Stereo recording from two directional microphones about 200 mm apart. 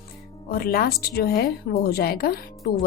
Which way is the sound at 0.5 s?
50° left (ahead or behind).